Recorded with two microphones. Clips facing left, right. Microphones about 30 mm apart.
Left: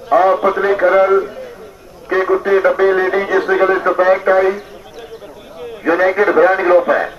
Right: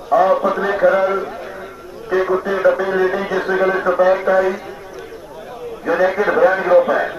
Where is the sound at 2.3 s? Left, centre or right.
Left.